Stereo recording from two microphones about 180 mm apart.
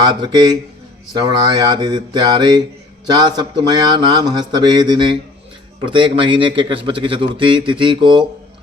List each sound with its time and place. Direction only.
0.0 s a man's voice: 25° right (ahead or behind)